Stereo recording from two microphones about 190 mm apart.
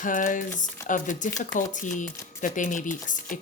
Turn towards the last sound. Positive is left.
turn(degrees=45)  # may be behind; listen again after turning